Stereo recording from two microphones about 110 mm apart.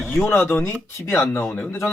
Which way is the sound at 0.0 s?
Centre (ahead or behind).